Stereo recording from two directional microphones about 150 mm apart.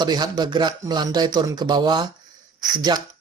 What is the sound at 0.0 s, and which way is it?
Speech, 30° right (ahead or behind).